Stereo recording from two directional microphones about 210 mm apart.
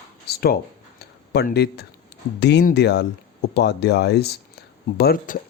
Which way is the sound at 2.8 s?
55° left (ahead or behind).